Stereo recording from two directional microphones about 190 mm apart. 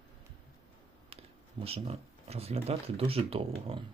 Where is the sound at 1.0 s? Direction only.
30° right (ahead or behind).